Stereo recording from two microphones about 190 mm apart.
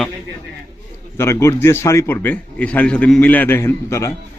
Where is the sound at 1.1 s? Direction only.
15° left (ahead or behind).